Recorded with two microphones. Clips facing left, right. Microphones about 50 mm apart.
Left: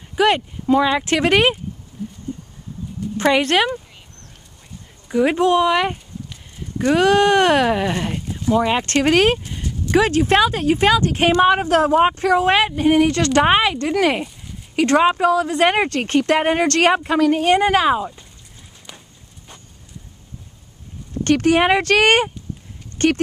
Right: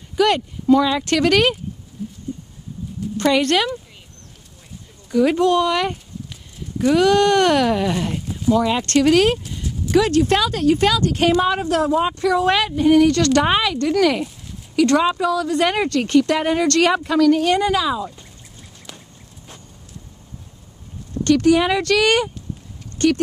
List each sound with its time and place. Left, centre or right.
0.1 s speech: left
3.2 s speech: left
5.0 s speech: left
7.0 s speech: left
8.5 s speech: left
9.6 s a sound: centre
9.9 s speech: left
21.2 s speech: left